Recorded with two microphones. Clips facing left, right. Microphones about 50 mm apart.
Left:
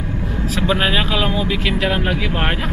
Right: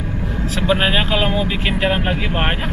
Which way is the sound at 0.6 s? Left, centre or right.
Centre.